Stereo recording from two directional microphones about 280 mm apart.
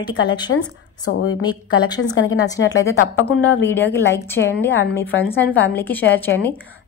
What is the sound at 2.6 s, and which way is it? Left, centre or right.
Speech, left.